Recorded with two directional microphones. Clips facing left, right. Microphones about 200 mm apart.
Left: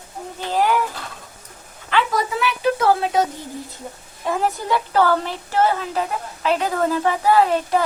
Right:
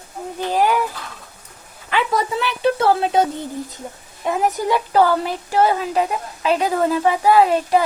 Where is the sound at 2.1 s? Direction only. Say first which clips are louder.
Right 1 dB; 30° right (ahead or behind).